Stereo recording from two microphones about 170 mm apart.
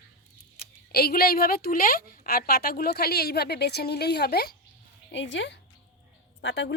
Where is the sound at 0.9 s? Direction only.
65° left (ahead or behind).